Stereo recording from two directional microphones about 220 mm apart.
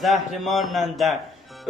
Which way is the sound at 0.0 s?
Centre (ahead or behind).